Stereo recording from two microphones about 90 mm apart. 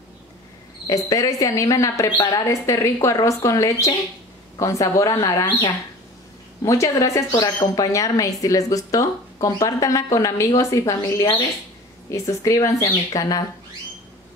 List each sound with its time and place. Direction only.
0.8 s speech: 40° left (ahead or behind)